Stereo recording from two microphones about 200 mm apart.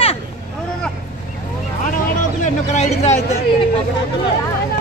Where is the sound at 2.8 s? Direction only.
35° left (ahead or behind).